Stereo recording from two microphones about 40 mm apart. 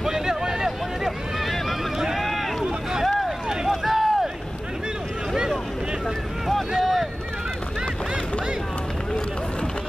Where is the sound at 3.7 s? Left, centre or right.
Centre.